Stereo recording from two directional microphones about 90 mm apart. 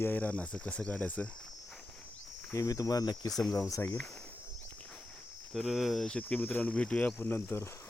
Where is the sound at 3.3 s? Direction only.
5° left (ahead or behind).